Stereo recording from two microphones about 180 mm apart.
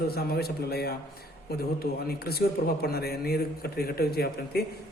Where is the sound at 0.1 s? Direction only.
60° left (ahead or behind).